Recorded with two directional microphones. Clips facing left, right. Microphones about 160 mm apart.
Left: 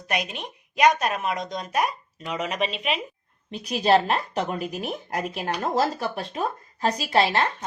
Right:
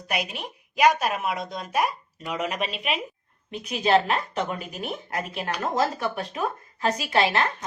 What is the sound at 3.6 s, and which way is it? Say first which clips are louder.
Speech: left 1 dB; 35° left (ahead or behind).